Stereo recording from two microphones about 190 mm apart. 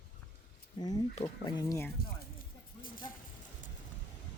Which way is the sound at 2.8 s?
50° left (ahead or behind).